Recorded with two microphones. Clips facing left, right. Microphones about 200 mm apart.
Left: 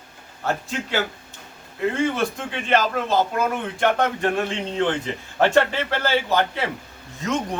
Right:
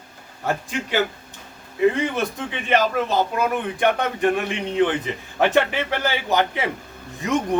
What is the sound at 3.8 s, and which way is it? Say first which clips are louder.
A man's voice: even; 15° right (ahead or behind).